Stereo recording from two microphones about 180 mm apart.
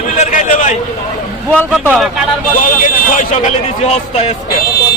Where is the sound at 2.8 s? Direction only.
45° left (ahead or behind).